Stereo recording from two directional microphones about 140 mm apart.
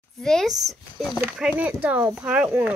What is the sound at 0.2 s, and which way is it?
Speech, 5° left (ahead or behind).